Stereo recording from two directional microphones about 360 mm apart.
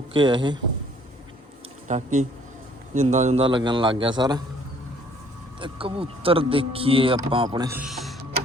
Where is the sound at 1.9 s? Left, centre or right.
Centre.